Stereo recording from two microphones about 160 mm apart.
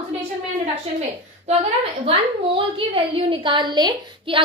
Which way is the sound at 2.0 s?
35° right (ahead or behind).